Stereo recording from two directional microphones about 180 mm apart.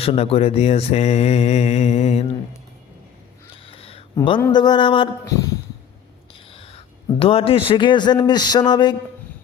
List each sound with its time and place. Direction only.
0.0 s mantra: 30° left (ahead or behind)
3.7 s a sound: 30° left (ahead or behind)
4.1 s a man's voice: 25° left (ahead or behind)
6.5 s whispering: 30° left (ahead or behind)
7.2 s a man's voice: 30° left (ahead or behind)